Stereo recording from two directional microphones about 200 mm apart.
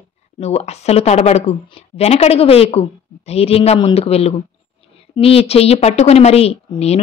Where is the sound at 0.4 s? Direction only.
30° left (ahead or behind).